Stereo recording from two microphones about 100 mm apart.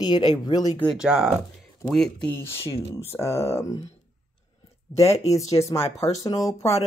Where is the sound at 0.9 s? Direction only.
5° right (ahead or behind).